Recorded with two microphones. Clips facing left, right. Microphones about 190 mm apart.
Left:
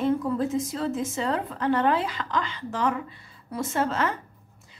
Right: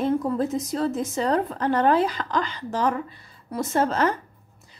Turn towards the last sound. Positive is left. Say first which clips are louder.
# right 4 dB
turn(degrees=-40)  # may be behind; listen again after turning